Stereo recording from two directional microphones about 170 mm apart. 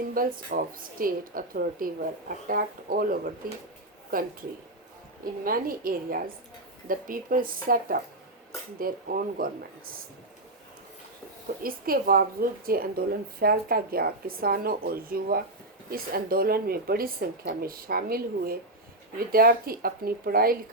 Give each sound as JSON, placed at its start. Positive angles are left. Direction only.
{"t": 0.1, "sound": "a woman's voice", "side_deg": -55}
{"t": 11.6, "sound": "a woman's voice", "side_deg": -60}